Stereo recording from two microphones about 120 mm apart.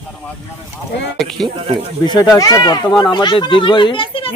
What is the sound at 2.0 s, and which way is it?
Speech, 35° left (ahead or behind).